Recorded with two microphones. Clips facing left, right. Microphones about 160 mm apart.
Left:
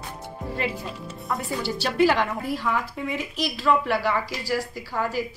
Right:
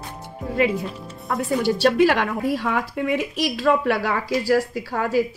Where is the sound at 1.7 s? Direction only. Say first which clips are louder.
Right 4 dB; 70° right (ahead or behind).